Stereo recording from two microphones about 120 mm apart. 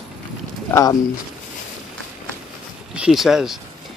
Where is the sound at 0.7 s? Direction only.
30° left (ahead or behind).